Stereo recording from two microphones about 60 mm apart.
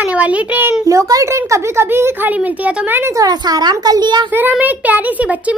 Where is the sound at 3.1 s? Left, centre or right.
Right.